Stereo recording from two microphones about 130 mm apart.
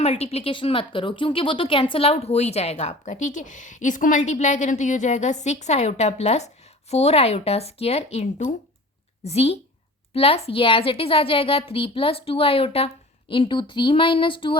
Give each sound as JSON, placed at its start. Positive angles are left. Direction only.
{"t": 0.0, "sound": "a woman's voice", "side_deg": 50}